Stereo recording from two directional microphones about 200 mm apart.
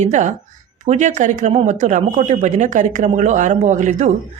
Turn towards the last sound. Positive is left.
turn(degrees=-40)  # may be behind; listen again after turning